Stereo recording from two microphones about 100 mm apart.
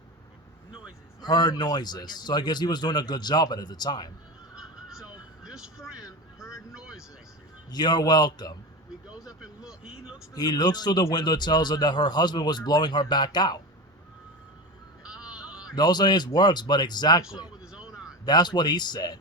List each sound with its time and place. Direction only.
1.2 s a man's voice: 45° left (ahead or behind)
4.5 s a sound: 5° right (ahead or behind)
6.7 s vehicle: 5° right (ahead or behind)
7.7 s a man's voice: 45° left (ahead or behind)
9.0 s vehicle: 5° right (ahead or behind)
10.3 s a man's voice: 40° left (ahead or behind)
15.0 s a sound: 10° right (ahead or behind)
15.7 s a man's voice: 45° left (ahead or behind)
17.2 s a sound: 5° right (ahead or behind)
18.3 s a man's voice: 45° left (ahead or behind)